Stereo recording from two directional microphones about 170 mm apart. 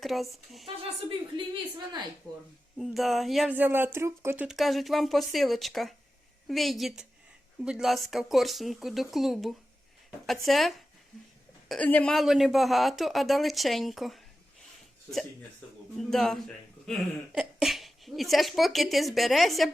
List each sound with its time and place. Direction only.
0.0 s speech: centre (ahead or behind)
2.7 s speech: centre (ahead or behind)
3.5 s speech: 10° right (ahead or behind)
4.4 s speech: centre (ahead or behind)
16.0 s speech: centre (ahead or behind)